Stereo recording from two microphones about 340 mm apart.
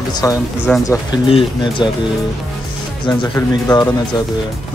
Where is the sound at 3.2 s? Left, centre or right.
Centre.